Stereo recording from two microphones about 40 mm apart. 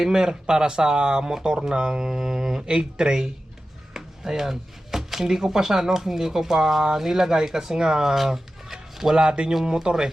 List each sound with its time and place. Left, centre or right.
0.0 s speech: centre